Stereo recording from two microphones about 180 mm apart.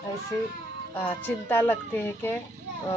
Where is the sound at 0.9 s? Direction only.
10° left (ahead or behind).